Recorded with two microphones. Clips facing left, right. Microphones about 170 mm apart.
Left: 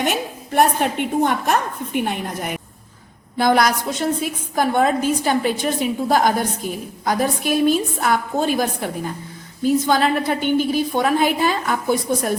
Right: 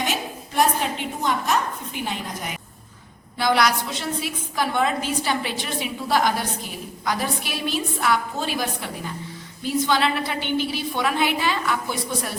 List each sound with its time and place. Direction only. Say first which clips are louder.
0.0 s a woman's voice: left 5 dB; 55° left (ahead or behind)